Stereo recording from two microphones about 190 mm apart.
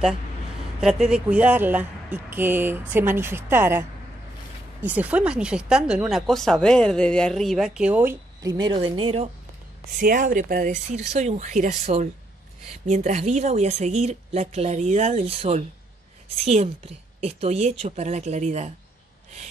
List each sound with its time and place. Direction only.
0.7 s speech: 5° right (ahead or behind)
4.8 s speech: 10° right (ahead or behind); by 9.3 s 30° right (ahead or behind)
9.9 s speech: 45° right (ahead or behind)